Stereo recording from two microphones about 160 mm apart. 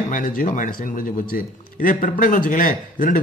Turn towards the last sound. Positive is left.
turn(degrees=60)  # may be behind; listen again after turning